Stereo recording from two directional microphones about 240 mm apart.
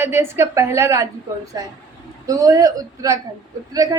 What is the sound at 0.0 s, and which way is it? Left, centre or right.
A woman's voice, centre.